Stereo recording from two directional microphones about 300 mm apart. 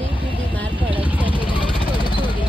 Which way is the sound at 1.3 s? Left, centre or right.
Centre.